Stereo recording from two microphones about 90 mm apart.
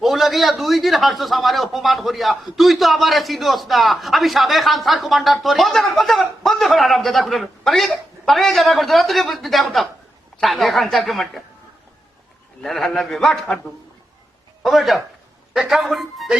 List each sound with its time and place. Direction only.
0.0 s a man's voice: centre (ahead or behind)
12.6 s a man's voice: 5° left (ahead or behind)
14.6 s a man's voice: centre (ahead or behind)